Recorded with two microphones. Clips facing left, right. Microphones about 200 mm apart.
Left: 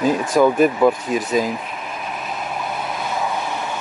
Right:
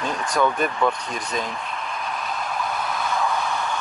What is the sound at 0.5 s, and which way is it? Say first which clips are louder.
Speech: left 8 dB; 5° left (ahead or behind).